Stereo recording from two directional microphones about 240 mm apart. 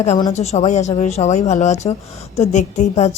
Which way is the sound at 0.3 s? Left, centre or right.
Left.